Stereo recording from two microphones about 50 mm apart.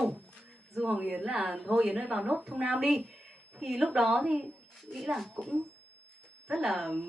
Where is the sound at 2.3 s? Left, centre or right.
Centre.